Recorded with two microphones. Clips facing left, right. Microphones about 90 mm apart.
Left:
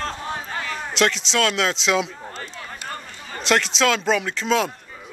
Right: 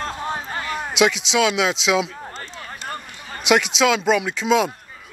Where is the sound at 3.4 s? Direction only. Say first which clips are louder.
Right 2 dB; 5° right (ahead or behind).